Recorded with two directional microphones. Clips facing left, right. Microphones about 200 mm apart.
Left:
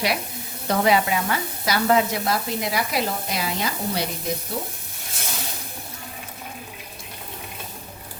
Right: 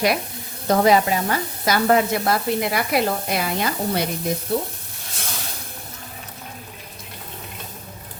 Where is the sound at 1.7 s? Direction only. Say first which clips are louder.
Right 2 dB; 50° right (ahead or behind).